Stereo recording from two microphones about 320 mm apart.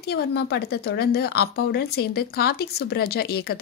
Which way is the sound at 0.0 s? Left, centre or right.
Left.